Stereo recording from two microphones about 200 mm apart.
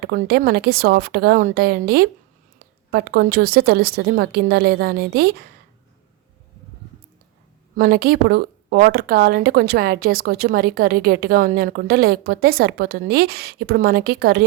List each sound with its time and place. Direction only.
0.0 s speech: 45° right (ahead or behind)
7.8 s speech: 50° right (ahead or behind)